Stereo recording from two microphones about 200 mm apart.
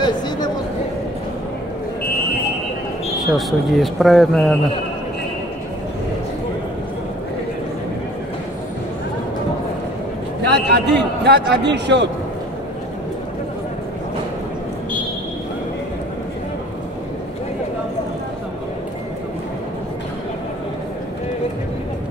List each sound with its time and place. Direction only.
3.3 s speech: centre (ahead or behind)
10.4 s a man's voice: 60° right (ahead or behind)